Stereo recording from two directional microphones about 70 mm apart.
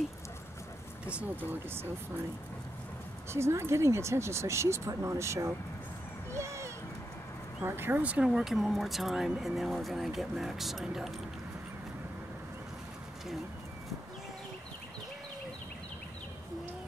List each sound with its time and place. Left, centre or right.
1.1 s speech: right
3.3 s speech: right
6.3 s a sound: right
7.6 s speech: right
8.0 s speech: centre
8.3 s speech: centre